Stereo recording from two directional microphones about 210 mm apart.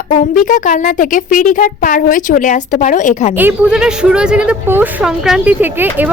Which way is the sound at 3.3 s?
10° right (ahead or behind).